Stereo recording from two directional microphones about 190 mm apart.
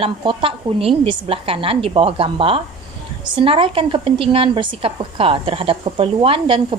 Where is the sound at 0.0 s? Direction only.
25° right (ahead or behind).